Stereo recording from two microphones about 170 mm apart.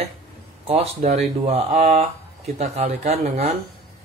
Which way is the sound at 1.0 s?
40° right (ahead or behind).